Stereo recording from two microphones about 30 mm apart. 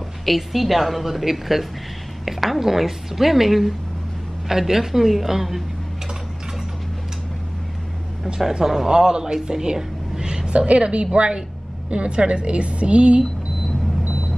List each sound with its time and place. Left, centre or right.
0.2 s a woman's voice: centre
8.5 s a woman's voice: centre; by 13.2 s right